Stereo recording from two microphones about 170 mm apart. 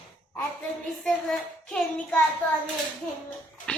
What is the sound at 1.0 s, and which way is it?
A woman's voice, 5° left (ahead or behind).